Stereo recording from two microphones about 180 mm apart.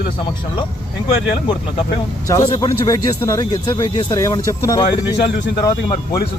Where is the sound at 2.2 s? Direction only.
20° left (ahead or behind).